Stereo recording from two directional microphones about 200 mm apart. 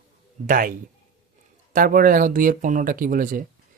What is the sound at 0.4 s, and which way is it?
Speech, 45° right (ahead or behind).